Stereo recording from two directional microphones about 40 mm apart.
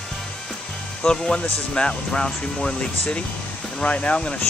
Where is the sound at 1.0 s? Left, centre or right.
Centre.